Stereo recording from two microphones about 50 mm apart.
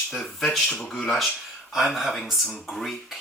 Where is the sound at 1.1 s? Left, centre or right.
Centre.